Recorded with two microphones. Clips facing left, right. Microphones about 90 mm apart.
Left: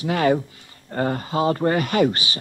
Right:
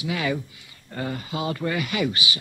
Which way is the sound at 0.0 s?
45° left (ahead or behind).